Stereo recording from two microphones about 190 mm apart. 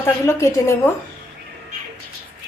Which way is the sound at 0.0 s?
15° left (ahead or behind).